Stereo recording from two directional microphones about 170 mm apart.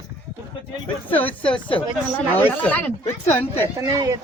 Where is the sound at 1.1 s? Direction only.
10° left (ahead or behind).